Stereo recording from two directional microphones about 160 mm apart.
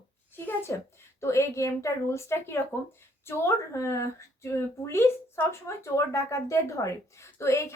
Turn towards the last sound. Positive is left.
turn(degrees=15)  # may be behind; listen again after turning